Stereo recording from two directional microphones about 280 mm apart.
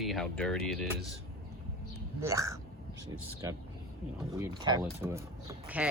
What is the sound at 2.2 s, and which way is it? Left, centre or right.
Speech, centre.